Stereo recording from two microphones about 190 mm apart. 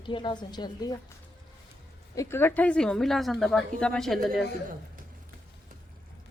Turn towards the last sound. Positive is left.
turn(degrees=0)  # may be behind; listen again after turning